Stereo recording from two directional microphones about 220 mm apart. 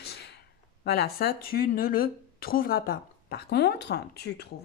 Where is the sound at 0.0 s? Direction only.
50° left (ahead or behind).